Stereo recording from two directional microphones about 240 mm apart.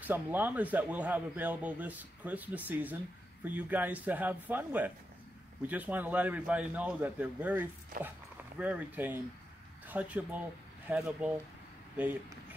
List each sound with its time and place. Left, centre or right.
0.0 s speech: centre
7.9 s speech: right
8.5 s speech: centre